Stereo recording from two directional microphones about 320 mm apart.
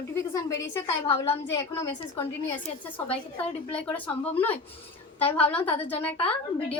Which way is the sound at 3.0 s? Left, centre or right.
Centre.